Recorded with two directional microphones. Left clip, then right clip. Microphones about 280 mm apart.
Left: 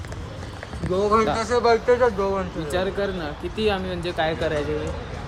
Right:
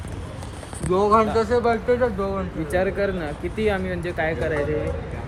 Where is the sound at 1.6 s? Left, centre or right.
Left.